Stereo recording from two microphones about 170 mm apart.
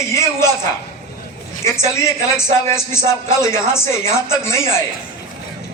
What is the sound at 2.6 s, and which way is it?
A man's voice, 15° left (ahead or behind).